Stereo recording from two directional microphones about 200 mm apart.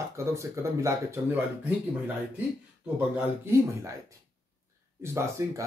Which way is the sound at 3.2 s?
15° right (ahead or behind).